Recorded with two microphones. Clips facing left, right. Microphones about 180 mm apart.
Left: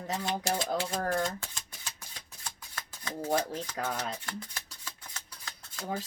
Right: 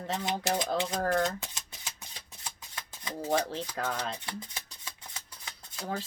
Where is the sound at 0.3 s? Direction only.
20° right (ahead or behind).